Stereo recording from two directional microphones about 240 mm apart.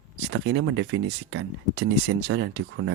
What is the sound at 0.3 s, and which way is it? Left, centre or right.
Speech, right.